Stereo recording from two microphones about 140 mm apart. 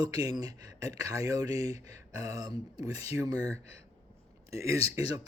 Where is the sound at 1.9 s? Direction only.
25° right (ahead or behind).